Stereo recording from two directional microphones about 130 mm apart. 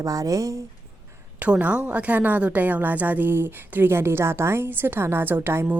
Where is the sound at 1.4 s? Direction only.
10° right (ahead or behind).